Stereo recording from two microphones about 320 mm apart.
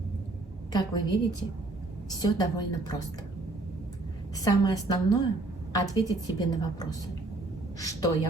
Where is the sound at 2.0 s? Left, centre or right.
Centre.